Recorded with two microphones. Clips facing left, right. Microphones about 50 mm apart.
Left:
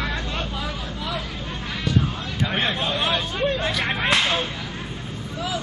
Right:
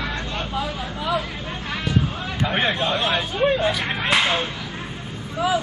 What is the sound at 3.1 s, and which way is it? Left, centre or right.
Chatter, centre.